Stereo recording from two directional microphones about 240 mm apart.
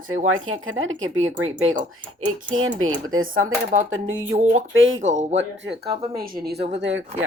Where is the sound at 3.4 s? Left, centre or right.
Right.